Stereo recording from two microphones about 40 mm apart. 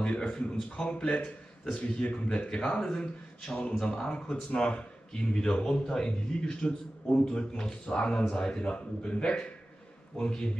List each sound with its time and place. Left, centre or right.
0.0 s speech: left